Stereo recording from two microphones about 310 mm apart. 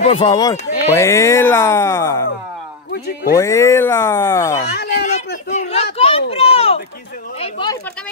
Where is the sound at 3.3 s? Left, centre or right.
Centre.